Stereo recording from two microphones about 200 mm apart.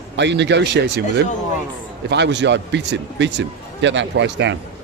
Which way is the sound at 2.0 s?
60° right (ahead or behind).